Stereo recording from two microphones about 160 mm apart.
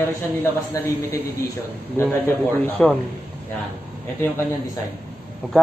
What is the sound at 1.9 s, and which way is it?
A man's voice, 15° left (ahead or behind).